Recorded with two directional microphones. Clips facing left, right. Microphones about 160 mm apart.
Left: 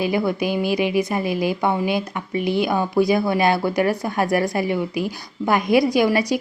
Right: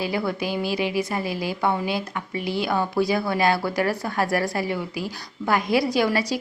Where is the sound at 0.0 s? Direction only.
20° left (ahead or behind).